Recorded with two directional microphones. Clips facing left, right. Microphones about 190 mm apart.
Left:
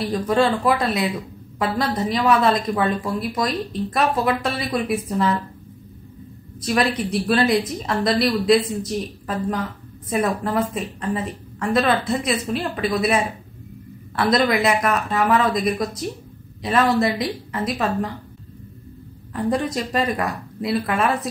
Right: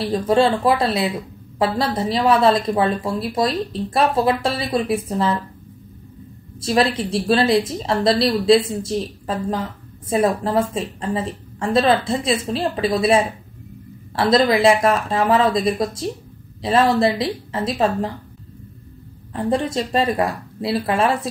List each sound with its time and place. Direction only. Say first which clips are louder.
0.0 s speech: right 2 dB; 30° right (ahead or behind)
6.6 s speech: right 2 dB; 30° right (ahead or behind)
19.3 s speech: right 2 dB; 30° right (ahead or behind)